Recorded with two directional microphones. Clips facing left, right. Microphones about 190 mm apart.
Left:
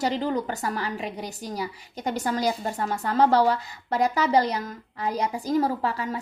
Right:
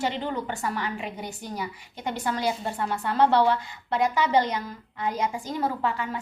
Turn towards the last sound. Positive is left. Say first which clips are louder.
# left 1 dB
turn(degrees=35)  # may be behind; listen again after turning